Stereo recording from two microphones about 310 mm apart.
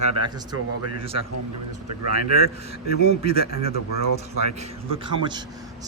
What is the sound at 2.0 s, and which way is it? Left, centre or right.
Speech, right.